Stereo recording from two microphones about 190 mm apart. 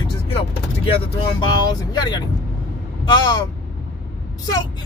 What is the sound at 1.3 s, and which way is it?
Speech, 25° left (ahead or behind).